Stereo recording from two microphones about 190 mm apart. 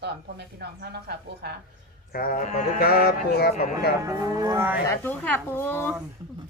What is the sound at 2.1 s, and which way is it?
Speech, 50° left (ahead or behind).